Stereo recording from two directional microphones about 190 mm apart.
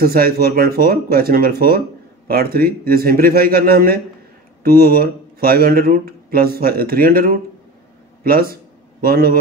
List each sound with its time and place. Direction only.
0.0 s speech: 50° right (ahead or behind)